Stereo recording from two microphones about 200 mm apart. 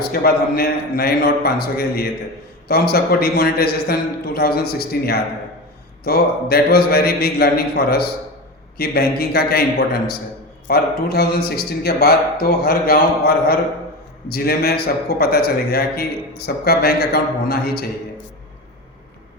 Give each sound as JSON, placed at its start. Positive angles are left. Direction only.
{"t": 0.1, "sound": "a man's voice", "side_deg": 50}